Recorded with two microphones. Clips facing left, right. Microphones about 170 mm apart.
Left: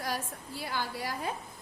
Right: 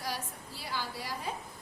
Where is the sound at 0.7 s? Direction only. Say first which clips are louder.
Left 2 dB; 50° left (ahead or behind).